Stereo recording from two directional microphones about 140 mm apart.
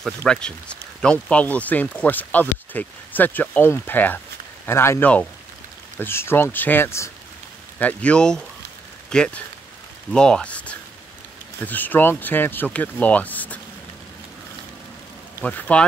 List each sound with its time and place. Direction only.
0.0 s speech: 5° left (ahead or behind)
15.4 s speech: 10° left (ahead or behind)